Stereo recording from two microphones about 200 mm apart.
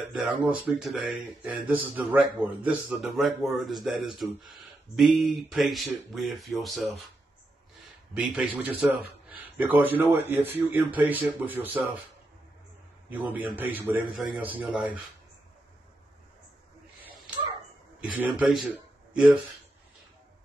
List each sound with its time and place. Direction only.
0.1 s speech: 5° right (ahead or behind)
8.2 s a man's voice: 10° right (ahead or behind)
13.1 s a man's voice: 10° right (ahead or behind)
18.0 s a man's voice: 5° right (ahead or behind)